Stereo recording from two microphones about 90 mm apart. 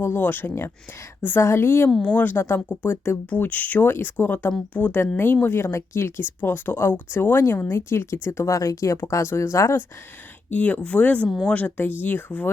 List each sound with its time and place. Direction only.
0.0 s a woman's voice: 25° left (ahead or behind)
10.5 s a woman's voice: 15° left (ahead or behind)